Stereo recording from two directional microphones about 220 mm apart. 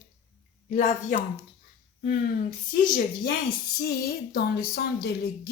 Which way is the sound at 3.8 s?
45° left (ahead or behind).